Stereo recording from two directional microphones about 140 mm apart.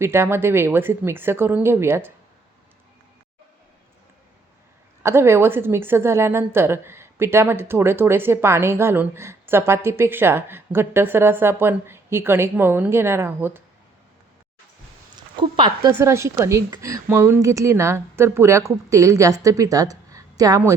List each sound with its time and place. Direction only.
0.0 s a woman's voice: 15° right (ahead or behind)
5.0 s a woman's voice: 15° right (ahead or behind)
15.1 s speech: 35° right (ahead or behind)
16.0 s a woman's voice: 20° right (ahead or behind)